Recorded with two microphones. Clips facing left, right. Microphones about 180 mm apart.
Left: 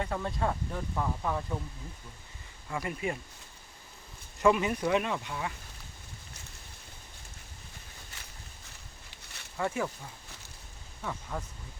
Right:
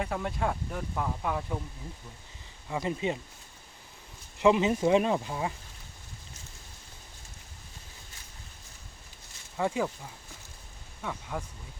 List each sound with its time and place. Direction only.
0.0 s speech: 10° right (ahead or behind)
2.6 s speech: 20° right (ahead or behind)
4.4 s speech: 20° right (ahead or behind)
9.0 s a sound: 70° left (ahead or behind)
9.6 s speech: 15° right (ahead or behind)
11.0 s speech: 5° right (ahead or behind)